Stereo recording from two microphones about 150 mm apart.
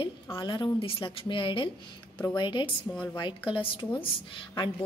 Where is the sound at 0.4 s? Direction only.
30° left (ahead or behind).